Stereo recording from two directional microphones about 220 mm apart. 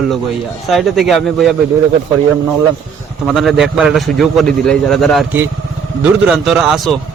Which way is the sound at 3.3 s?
Centre (ahead or behind).